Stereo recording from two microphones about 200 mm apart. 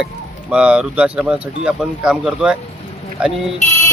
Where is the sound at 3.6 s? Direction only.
35° left (ahead or behind).